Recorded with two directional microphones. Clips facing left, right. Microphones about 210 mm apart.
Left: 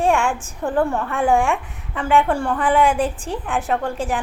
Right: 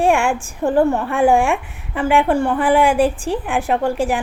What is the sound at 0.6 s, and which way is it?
Speech, 25° right (ahead or behind).